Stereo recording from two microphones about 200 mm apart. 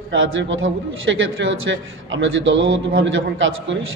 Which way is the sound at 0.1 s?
70° right (ahead or behind).